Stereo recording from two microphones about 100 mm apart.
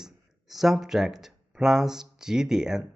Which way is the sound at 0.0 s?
5° right (ahead or behind).